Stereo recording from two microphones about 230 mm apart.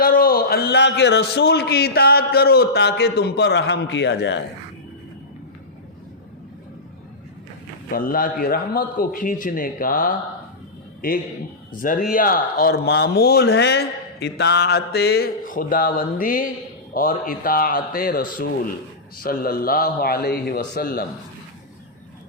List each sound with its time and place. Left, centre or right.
0.0 s a man's voice: left
7.9 s a man's voice: left